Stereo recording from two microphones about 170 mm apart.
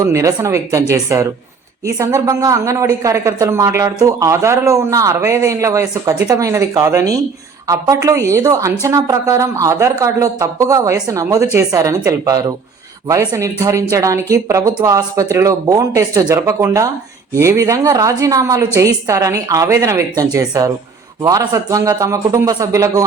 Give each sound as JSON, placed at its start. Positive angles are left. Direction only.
{"t": 0.0, "sound": "a woman's voice", "side_deg": -20}